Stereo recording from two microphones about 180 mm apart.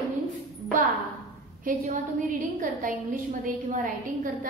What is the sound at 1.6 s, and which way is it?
A woman's voice, 50° right (ahead or behind).